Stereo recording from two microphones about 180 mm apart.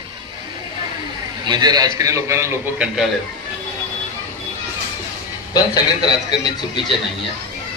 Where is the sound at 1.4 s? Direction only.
25° right (ahead or behind).